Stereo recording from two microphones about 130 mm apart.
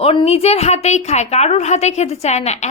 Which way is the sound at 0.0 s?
45° left (ahead or behind).